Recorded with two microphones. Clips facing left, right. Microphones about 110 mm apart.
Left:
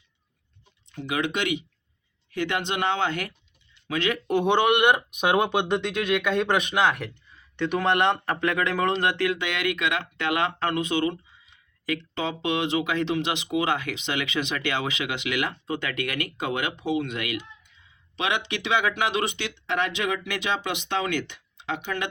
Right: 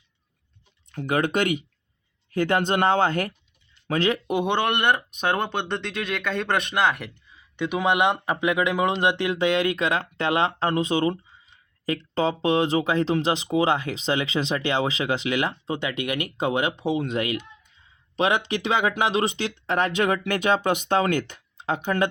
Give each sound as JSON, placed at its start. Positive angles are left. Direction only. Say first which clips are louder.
{"t": 0.9, "sound": "speech", "louder": "right 4 dB", "side_deg": -50}
{"t": 4.4, "sound": "speech", "louder": "left 3 dB", "side_deg": 5}
{"t": 9.4, "sound": "speech", "louder": "right 5 dB", "side_deg": -35}